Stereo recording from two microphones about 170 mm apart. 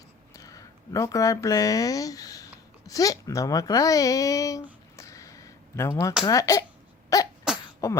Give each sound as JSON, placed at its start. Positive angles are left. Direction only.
{"t": 0.3, "sound": "speech", "side_deg": 20}
{"t": 4.9, "sound": "a sound", "side_deg": 20}
{"t": 6.2, "sound": "speech", "side_deg": 20}